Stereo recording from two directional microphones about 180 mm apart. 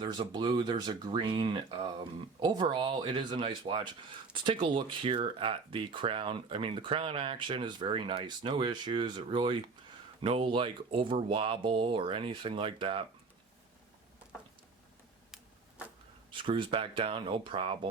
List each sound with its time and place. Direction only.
0.0 s speech: 25° right (ahead or behind)
16.3 s speech: 30° right (ahead or behind)